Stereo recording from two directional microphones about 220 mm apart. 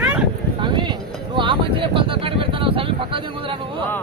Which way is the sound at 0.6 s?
20° right (ahead or behind).